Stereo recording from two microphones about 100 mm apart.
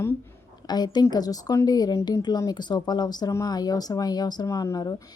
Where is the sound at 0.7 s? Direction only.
45° left (ahead or behind).